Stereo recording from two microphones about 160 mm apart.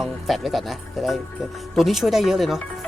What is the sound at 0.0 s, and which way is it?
Speech, centre (ahead or behind).